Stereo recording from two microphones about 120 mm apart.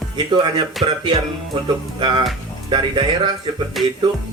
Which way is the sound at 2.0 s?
45° right (ahead or behind).